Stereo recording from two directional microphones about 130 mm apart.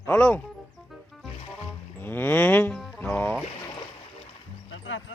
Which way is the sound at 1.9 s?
15° left (ahead or behind).